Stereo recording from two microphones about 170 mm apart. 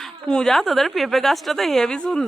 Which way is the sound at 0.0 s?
5° left (ahead or behind).